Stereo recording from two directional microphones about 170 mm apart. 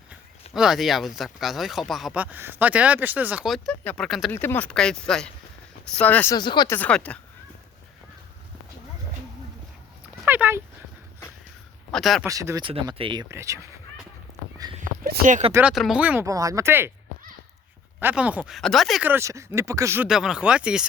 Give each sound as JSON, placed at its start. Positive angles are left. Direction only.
{"t": 0.5, "sound": "speech", "side_deg": 0}
{"t": 4.3, "sound": "speech", "side_deg": 10}
{"t": 6.3, "sound": "speech", "side_deg": 25}
{"t": 6.7, "sound": "speech", "side_deg": 10}
{"t": 10.2, "sound": "dog", "side_deg": -10}
{"t": 11.9, "sound": "speech", "side_deg": 0}
{"t": 12.2, "sound": "speech", "side_deg": -15}
{"t": 13.2, "sound": "speech", "side_deg": -15}
{"t": 14.8, "sound": "speech", "side_deg": -55}
{"t": 15.5, "sound": "speech", "side_deg": -5}
{"t": 18.0, "sound": "speech", "side_deg": -10}
{"t": 19.0, "sound": "speech", "side_deg": -15}
{"t": 20.1, "sound": "speech", "side_deg": -5}